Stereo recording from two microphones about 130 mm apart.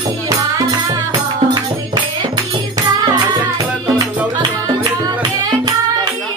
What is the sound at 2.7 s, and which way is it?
Music, 30° right (ahead or behind).